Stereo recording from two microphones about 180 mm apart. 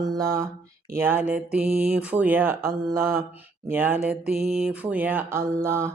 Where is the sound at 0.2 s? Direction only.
15° right (ahead or behind).